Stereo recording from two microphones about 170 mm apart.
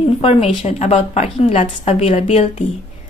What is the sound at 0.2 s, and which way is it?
A woman's voice, 35° left (ahead or behind).